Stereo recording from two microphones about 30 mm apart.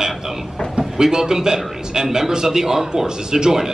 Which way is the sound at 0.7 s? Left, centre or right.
Right.